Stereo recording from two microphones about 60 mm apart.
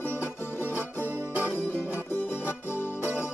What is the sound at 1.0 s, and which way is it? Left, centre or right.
Music, right.